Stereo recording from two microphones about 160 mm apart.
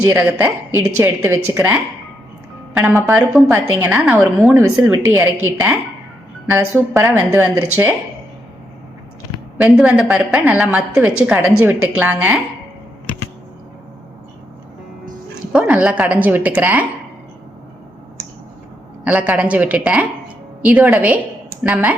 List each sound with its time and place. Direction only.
0.1 s a woman's voice: 10° right (ahead or behind)
3.5 s a woman's voice: 10° right (ahead or behind)
9.6 s a woman's voice: 5° right (ahead or behind)
15.5 s a woman's voice: 5° right (ahead or behind)
19.0 s a woman's voice: 10° right (ahead or behind)